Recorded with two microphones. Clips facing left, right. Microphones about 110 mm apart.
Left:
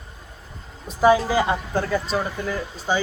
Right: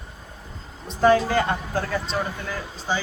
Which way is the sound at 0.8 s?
5° left (ahead or behind).